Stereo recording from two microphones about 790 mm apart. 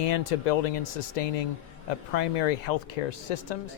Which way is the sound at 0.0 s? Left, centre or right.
Left.